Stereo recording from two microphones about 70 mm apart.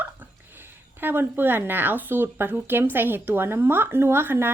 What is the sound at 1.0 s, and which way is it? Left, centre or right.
A woman's voice, right.